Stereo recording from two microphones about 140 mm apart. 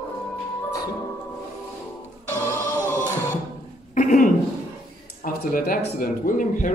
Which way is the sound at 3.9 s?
85° left.